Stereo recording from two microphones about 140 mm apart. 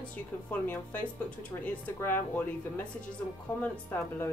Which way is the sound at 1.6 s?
15° left (ahead or behind).